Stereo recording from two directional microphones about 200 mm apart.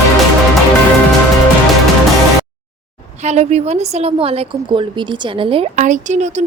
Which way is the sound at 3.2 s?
35° right (ahead or behind).